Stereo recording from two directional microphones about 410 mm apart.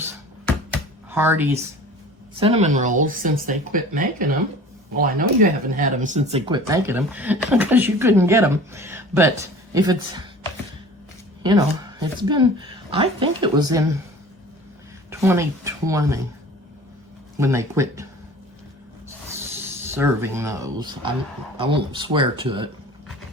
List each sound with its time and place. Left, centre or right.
1.1 s speech: centre
2.4 s speech: centre
11.4 s speech: centre
15.1 s speech: centre
17.3 s speech: centre
19.9 s speech: centre